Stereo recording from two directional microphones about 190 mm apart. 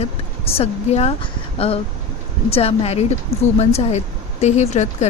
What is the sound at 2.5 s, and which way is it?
Speech, 30° left (ahead or behind).